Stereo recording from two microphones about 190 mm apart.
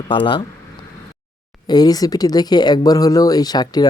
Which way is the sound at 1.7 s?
20° left (ahead or behind).